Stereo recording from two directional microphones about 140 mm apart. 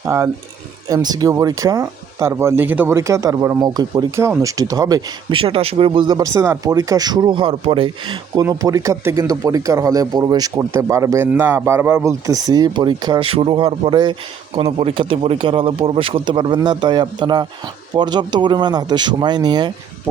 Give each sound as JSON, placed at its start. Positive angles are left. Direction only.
{"t": 0.0, "sound": "speech", "side_deg": -20}
{"t": 5.3, "sound": "speech", "side_deg": -40}
{"t": 12.2, "sound": "speech", "side_deg": -25}